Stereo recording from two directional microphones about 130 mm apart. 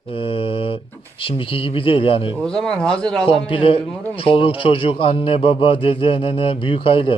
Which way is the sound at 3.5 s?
45° left (ahead or behind).